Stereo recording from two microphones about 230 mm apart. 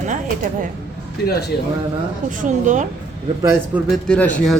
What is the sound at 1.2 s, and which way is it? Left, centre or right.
Speech, left.